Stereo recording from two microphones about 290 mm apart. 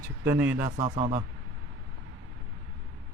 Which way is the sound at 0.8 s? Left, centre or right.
Right.